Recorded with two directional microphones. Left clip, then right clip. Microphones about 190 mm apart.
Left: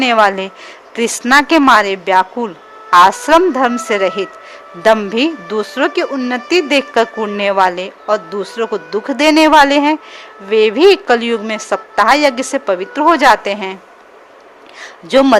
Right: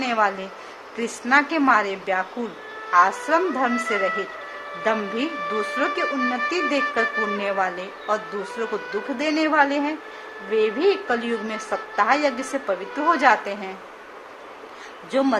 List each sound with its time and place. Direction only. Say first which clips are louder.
0.0 s a woman's voice: left 11 dB; 50° left (ahead or behind)
15.1 s speech: left 12 dB; 50° left (ahead or behind)